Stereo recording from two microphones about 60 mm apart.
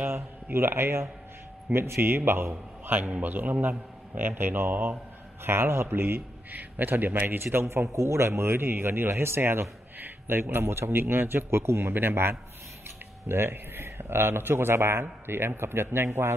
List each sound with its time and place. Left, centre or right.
0.0 s a man's voice: right